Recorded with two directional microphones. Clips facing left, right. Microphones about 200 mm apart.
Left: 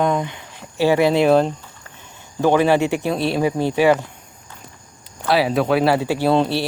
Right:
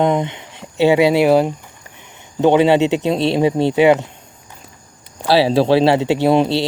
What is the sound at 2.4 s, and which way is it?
Speech, 20° right (ahead or behind).